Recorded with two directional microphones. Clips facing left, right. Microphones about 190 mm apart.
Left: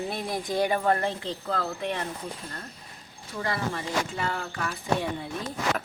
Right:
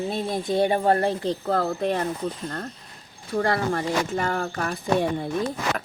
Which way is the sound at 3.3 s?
50° right (ahead or behind).